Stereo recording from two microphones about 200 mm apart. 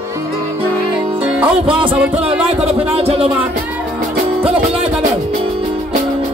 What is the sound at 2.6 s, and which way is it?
Speech, 30° right (ahead or behind).